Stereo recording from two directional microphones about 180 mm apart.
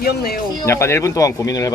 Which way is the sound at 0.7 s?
15° left (ahead or behind).